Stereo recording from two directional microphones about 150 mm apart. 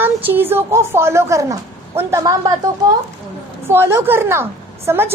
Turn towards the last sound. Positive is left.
turn(degrees=-15)  # may be behind; listen again after turning